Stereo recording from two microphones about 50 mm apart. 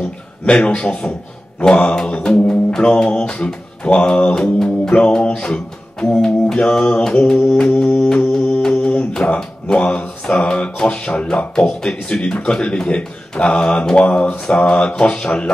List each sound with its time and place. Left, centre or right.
0.5 s speech: centre
8.1 s music: centre
8.6 s speech: centre
14.5 s a sound: left